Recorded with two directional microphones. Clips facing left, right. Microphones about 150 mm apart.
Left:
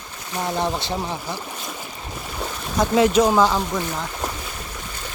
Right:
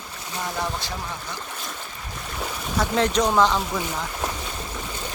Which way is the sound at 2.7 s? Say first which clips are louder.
Left 5 dB; 10° left (ahead or behind).